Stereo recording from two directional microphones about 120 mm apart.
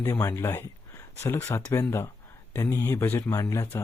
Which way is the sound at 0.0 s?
25° left (ahead or behind).